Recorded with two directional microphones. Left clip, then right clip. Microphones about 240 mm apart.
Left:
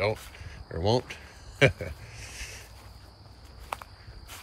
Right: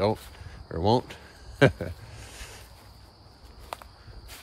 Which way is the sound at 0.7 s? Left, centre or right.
Centre.